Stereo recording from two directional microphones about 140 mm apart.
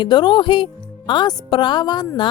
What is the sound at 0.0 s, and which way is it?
Speech, 35° left (ahead or behind).